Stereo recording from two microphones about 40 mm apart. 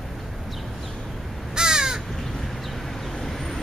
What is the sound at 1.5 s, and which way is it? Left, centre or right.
Crow, centre.